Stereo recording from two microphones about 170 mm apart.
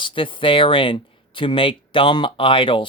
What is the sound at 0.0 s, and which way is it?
Speech, 30° left (ahead or behind).